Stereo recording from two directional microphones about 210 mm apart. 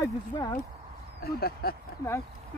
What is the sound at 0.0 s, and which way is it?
Speech, 20° left (ahead or behind).